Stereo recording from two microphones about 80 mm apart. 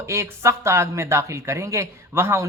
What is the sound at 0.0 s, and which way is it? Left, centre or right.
Speech, right.